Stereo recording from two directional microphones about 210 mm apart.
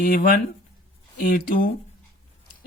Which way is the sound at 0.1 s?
40° left (ahead or behind).